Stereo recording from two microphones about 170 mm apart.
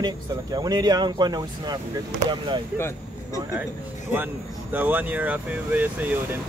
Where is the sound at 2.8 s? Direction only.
15° left (ahead or behind).